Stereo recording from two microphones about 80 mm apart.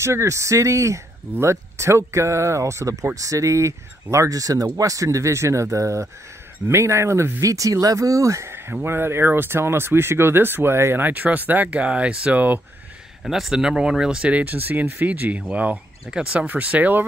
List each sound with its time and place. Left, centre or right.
0.0 s speech: right
13.2 s speech: centre; by 17.0 s right